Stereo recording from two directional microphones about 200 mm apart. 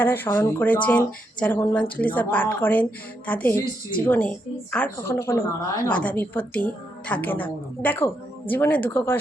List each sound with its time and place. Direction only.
0.0 s a woman's voice: 10° left (ahead or behind)